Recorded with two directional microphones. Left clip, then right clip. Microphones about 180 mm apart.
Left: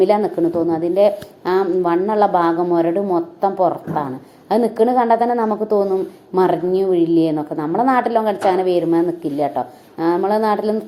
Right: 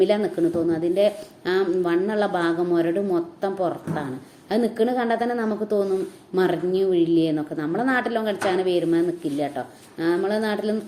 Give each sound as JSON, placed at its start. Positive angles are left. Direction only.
{"t": 0.0, "sound": "a woman's voice", "side_deg": 0}